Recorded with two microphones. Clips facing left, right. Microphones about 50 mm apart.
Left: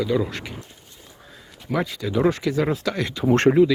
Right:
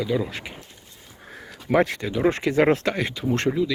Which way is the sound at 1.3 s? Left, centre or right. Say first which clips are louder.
Right 5 dB; right.